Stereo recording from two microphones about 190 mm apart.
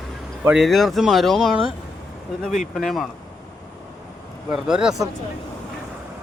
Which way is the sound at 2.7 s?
Centre (ahead or behind).